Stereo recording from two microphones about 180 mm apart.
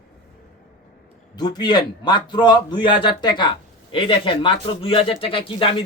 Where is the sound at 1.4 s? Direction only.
25° left (ahead or behind).